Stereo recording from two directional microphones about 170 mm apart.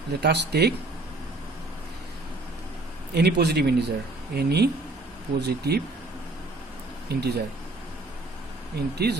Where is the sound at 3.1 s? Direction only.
75° right (ahead or behind).